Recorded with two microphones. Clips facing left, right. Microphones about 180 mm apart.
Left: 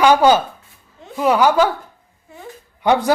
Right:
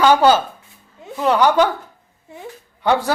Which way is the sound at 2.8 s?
15° left (ahead or behind).